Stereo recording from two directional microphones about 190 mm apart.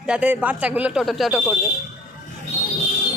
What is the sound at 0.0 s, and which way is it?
Speech, 5° right (ahead or behind).